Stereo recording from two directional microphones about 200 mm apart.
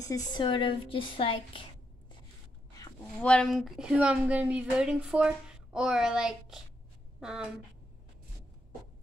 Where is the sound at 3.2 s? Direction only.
5° left (ahead or behind).